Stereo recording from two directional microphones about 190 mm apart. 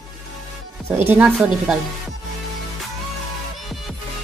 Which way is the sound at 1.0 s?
5° right (ahead or behind).